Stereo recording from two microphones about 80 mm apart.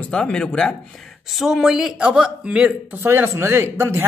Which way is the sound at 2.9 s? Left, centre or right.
Right.